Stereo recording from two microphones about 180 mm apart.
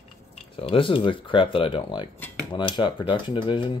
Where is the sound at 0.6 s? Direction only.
30° left (ahead or behind).